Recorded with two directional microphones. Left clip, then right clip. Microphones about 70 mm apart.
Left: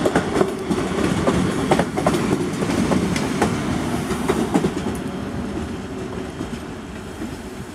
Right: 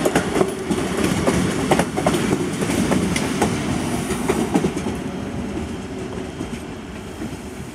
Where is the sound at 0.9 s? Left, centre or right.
Right.